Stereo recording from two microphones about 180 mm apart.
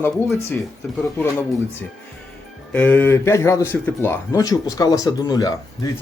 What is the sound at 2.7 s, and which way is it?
Speech, 10° left (ahead or behind).